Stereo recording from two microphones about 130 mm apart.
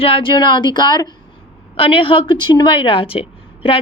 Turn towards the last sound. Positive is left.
turn(degrees=45)  # may be behind; listen again after turning